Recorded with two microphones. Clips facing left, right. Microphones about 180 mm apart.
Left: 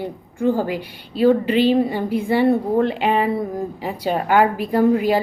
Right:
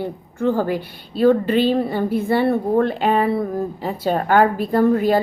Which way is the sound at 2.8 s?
45° right (ahead or behind).